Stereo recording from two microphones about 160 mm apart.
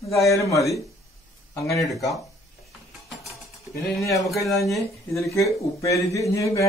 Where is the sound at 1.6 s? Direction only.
Centre (ahead or behind).